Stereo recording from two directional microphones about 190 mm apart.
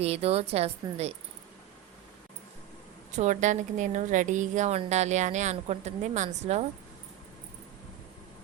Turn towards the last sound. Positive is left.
turn(degrees=-35)  # may be behind; listen again after turning